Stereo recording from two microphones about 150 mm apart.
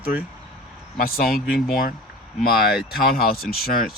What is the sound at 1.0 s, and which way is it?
Speech, 80° left.